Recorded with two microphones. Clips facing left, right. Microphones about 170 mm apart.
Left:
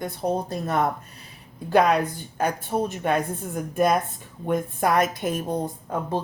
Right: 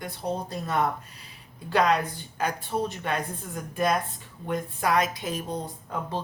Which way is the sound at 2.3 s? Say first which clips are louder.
Left 4 dB; 45° left (ahead or behind).